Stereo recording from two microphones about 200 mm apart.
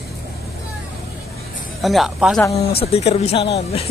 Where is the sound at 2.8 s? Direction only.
30° left (ahead or behind).